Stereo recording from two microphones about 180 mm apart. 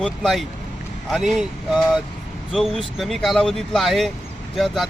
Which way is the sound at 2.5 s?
Centre (ahead or behind).